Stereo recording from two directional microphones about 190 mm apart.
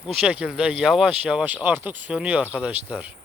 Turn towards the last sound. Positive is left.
turn(degrees=-10)  # may be behind; listen again after turning